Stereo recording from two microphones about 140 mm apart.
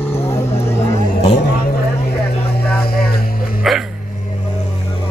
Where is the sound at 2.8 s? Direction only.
90° left.